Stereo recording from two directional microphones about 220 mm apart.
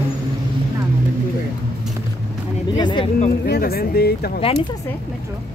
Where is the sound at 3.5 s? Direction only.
45° left (ahead or behind).